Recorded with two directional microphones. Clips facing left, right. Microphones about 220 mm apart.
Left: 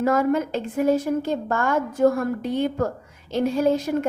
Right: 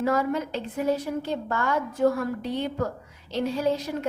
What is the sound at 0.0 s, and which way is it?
A woman's voice, 50° left (ahead or behind).